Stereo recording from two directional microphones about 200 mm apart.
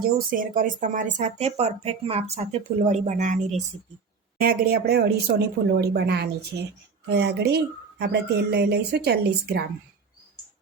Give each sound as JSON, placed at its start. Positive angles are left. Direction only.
{"t": 0.0, "sound": "speech", "side_deg": -45}
{"t": 4.4, "sound": "speech", "side_deg": -45}